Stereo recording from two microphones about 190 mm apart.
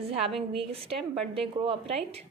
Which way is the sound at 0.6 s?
30° right (ahead or behind).